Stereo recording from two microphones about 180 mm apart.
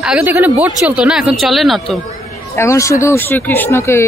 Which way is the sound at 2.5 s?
15° left (ahead or behind).